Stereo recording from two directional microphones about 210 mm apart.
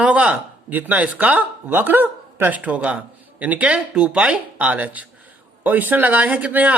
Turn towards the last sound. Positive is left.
turn(degrees=-5)  # may be behind; listen again after turning